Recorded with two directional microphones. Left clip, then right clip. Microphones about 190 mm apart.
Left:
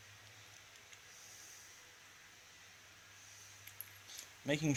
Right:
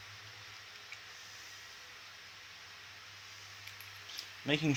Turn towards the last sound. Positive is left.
turn(degrees=45)  # may be behind; listen again after turning